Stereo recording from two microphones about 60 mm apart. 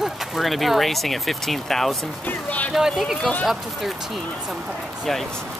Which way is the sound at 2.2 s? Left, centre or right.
Left.